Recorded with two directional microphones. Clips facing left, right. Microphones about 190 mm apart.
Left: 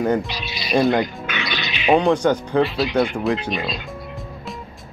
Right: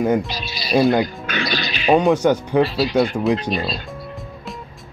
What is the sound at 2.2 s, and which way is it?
Speech, 10° right (ahead or behind).